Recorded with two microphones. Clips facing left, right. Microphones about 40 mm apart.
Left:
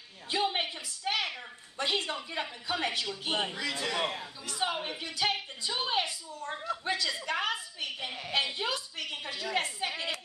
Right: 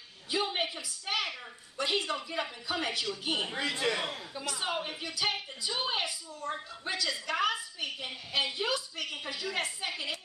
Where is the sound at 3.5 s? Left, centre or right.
Right.